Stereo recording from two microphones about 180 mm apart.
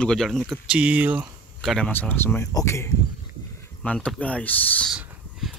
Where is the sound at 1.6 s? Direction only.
Centre (ahead or behind).